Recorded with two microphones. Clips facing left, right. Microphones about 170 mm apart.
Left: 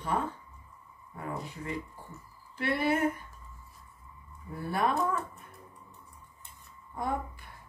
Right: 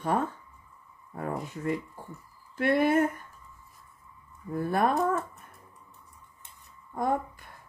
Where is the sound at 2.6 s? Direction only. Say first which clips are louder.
Right 5 dB; 50° right (ahead or behind).